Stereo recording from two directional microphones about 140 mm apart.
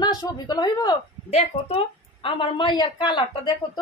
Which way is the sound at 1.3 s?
45° left (ahead or behind).